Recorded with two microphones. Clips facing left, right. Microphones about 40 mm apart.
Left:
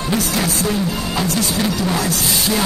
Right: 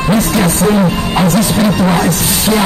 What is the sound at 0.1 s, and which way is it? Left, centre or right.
Music, right.